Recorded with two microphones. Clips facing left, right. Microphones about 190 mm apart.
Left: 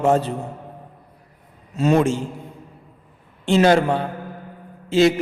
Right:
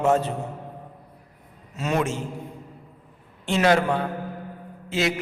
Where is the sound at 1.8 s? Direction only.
30° left (ahead or behind).